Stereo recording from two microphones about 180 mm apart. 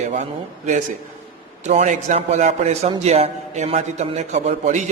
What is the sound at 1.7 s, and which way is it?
A man's voice, 40° right (ahead or behind).